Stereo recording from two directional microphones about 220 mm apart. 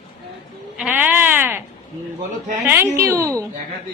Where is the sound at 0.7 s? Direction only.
5° right (ahead or behind).